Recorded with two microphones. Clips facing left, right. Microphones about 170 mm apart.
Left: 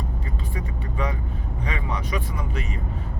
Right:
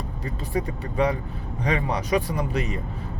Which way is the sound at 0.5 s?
35° right (ahead or behind).